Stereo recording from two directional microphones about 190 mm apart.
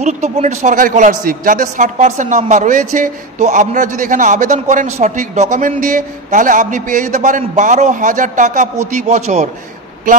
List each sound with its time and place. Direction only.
0.0 s a man's voice: 35° right (ahead or behind)